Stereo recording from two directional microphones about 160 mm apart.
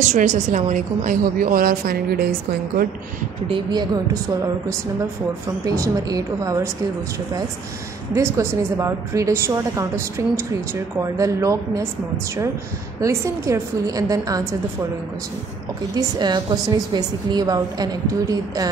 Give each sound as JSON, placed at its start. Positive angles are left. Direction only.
{"t": 0.0, "sound": "a woman's voice", "side_deg": -50}
{"t": 3.4, "sound": "a woman's voice", "side_deg": -30}
{"t": 5.7, "sound": "a woman's voice", "side_deg": -25}
{"t": 8.1, "sound": "a woman's voice", "side_deg": -15}
{"t": 13.0, "sound": "a woman's voice", "side_deg": -20}
{"t": 16.0, "sound": "a woman's voice", "side_deg": -25}